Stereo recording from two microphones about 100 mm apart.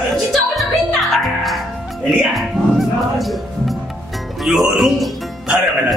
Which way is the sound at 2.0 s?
Centre (ahead or behind).